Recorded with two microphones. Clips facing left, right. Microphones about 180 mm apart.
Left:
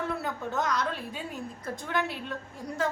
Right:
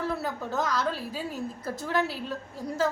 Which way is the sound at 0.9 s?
35° right (ahead or behind).